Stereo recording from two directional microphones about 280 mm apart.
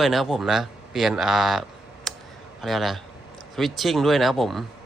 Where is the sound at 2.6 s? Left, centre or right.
Centre.